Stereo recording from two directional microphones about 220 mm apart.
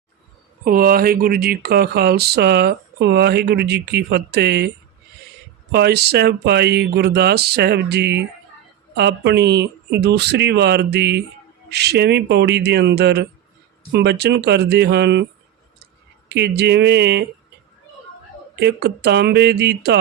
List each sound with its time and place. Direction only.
0.6 s speech: 40° right (ahead or behind)
5.7 s speech: 50° right (ahead or behind)
16.3 s speech: 50° right (ahead or behind)
18.6 s speech: 50° right (ahead or behind)